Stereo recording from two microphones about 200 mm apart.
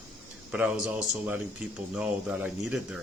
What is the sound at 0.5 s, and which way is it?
Speech, 5° right (ahead or behind).